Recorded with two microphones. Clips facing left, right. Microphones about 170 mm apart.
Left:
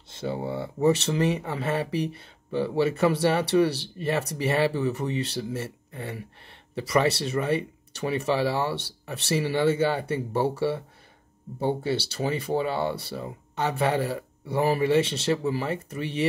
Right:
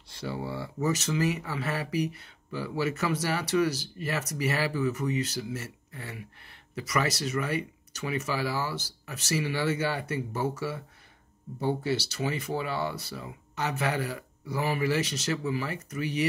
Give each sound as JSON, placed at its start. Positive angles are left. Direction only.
{"t": 0.1, "sound": "speech", "side_deg": 25}